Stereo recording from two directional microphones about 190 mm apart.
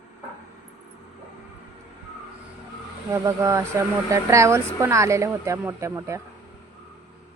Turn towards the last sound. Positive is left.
turn(degrees=-15)  # may be behind; listen again after turning